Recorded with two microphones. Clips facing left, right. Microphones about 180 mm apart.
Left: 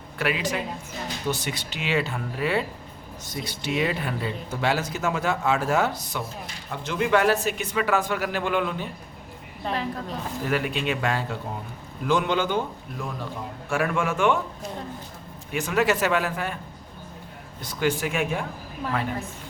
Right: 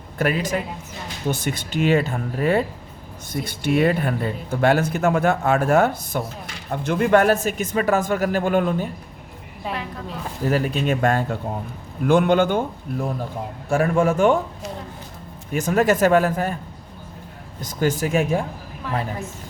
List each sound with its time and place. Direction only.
0.2 s speech: 45° right (ahead or behind)
10.5 s speech: 40° right (ahead or behind)
13.7 s a man's voice: 35° right (ahead or behind)
15.5 s speech: 45° right (ahead or behind)
17.6 s a man's voice: 45° right (ahead or behind)